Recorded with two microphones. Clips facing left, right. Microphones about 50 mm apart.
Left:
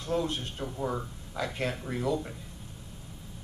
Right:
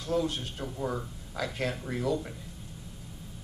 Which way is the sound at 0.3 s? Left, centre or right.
Left.